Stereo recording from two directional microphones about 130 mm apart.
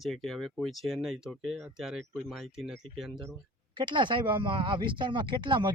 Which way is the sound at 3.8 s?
35° right (ahead or behind).